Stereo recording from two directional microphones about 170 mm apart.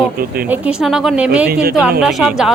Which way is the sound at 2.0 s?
5° right (ahead or behind).